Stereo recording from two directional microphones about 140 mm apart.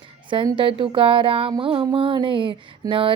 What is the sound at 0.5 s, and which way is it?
Speech, 40° right (ahead or behind).